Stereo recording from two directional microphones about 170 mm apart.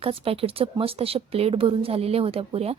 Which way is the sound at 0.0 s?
35° right (ahead or behind).